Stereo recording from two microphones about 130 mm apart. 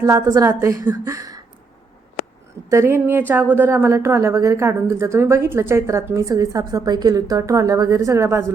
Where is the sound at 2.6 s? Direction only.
20° right (ahead or behind).